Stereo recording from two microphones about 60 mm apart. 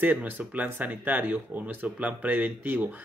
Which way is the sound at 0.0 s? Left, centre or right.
Right.